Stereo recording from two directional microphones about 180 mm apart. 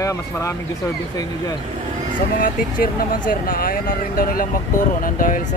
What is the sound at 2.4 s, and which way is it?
Speech, 50° left (ahead or behind).